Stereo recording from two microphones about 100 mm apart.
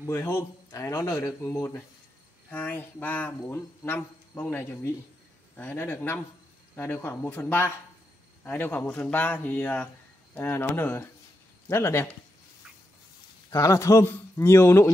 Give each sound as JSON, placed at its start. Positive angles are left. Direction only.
{"t": 0.0, "sound": "speech", "side_deg": 25}
{"t": 2.5, "sound": "speech", "side_deg": 20}
{"t": 13.5, "sound": "speech", "side_deg": 30}